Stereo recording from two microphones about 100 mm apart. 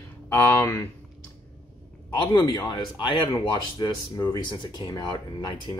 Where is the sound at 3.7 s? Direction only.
40° left (ahead or behind).